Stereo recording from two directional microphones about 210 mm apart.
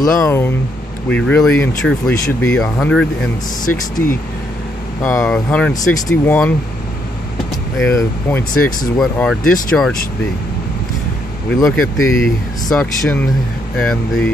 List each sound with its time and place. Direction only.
0.0 s speech: 10° left (ahead or behind)
5.0 s speech: 10° left (ahead or behind)
7.8 s speech: 10° left (ahead or behind)
11.5 s speech: centre (ahead or behind)